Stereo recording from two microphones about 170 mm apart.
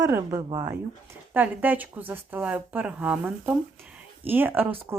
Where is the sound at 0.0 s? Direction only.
20° right (ahead or behind).